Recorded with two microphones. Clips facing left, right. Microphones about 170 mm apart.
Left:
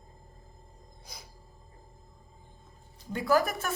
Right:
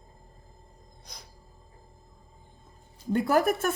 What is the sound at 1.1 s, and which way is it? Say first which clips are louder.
Music: even; 5° left (ahead or behind).